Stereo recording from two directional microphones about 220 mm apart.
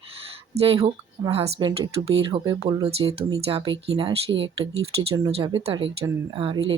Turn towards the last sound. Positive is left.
turn(degrees=-25)  # may be behind; listen again after turning